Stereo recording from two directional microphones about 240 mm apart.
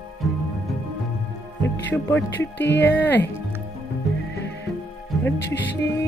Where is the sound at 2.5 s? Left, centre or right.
Left.